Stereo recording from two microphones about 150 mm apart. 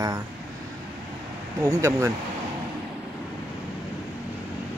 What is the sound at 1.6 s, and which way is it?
Speech, 20° right (ahead or behind).